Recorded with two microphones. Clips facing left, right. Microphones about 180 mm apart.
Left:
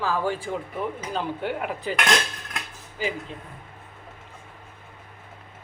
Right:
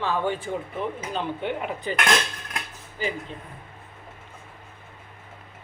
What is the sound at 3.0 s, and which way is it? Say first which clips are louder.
Speech: left 1 dB; 5° left (ahead or behind).